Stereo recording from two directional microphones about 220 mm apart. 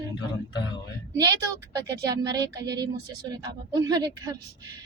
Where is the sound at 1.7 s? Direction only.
20° right (ahead or behind).